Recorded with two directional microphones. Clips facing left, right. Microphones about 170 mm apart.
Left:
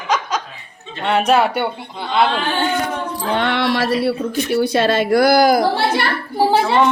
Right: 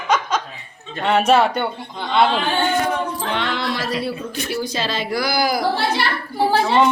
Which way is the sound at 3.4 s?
65° left (ahead or behind).